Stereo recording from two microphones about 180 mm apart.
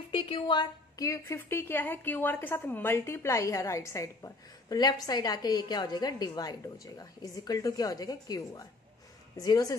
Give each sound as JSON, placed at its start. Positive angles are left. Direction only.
{"t": 0.1, "sound": "a woman's voice", "side_deg": 30}